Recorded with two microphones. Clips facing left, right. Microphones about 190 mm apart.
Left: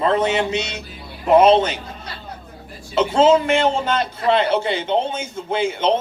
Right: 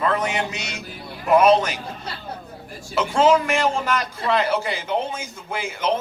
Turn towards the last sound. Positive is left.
turn(degrees=25)  # may be behind; listen again after turning